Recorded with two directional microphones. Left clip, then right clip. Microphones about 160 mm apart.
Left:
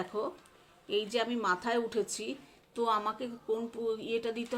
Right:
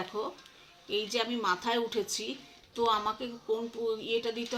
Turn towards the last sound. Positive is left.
turn(degrees=35)  # may be behind; listen again after turning